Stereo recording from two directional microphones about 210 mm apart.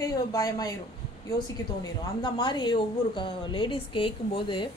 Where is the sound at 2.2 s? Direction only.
20° left (ahead or behind).